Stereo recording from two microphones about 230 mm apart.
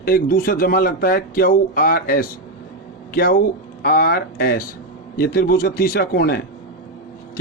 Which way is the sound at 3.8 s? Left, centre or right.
Left.